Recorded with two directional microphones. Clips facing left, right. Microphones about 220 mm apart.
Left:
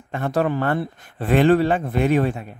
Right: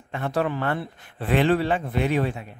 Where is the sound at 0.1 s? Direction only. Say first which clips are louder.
Left 4 dB; 45° left (ahead or behind).